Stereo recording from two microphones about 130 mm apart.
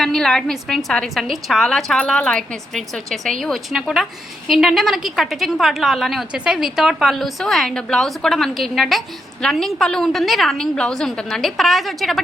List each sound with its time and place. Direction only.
0.0 s a woman's voice: 5° left (ahead or behind)